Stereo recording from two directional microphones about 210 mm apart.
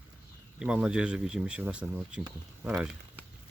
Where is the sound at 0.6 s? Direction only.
5° right (ahead or behind).